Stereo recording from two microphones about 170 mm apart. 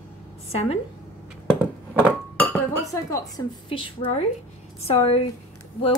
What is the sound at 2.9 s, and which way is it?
Speech, 20° left (ahead or behind).